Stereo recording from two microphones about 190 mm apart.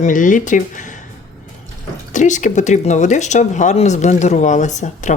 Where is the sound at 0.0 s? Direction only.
45° left (ahead or behind).